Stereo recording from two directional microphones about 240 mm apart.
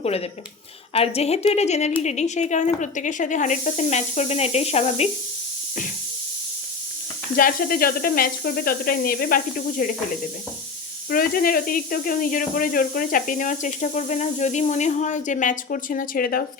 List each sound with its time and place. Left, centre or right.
0.0 s a woman's voice: left
7.3 s speech: left
11.1 s speech: left